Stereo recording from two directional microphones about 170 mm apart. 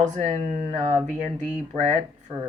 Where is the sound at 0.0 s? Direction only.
45° right (ahead or behind).